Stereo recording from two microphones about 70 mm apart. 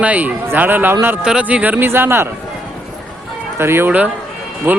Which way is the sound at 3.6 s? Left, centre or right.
Right.